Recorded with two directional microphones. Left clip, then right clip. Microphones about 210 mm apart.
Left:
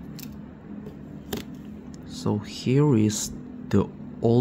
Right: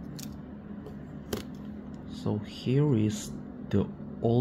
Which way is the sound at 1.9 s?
30° left (ahead or behind).